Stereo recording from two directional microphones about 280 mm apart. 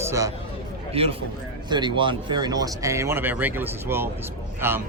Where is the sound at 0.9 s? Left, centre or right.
Right.